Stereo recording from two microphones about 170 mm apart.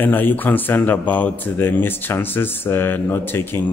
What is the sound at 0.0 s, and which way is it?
Speech, 10° left (ahead or behind).